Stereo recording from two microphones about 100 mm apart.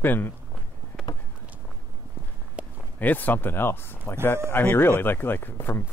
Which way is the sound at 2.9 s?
15° left (ahead or behind).